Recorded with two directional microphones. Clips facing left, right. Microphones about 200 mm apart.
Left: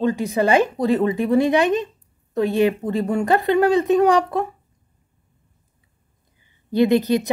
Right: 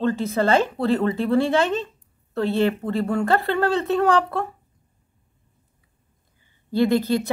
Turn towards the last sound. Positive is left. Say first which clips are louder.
# left 3 dB
turn(degrees=20)  # may be behind; listen again after turning